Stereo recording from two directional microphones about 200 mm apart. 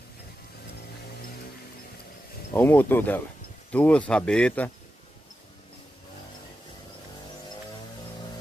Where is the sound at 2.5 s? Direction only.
10° left (ahead or behind).